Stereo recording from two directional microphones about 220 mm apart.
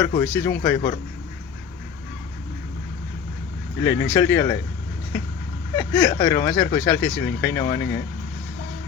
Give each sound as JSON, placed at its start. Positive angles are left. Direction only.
{"t": 0.0, "sound": "speech", "side_deg": 15}
{"t": 3.8, "sound": "speech", "side_deg": 10}
{"t": 5.7, "sound": "speech", "side_deg": 15}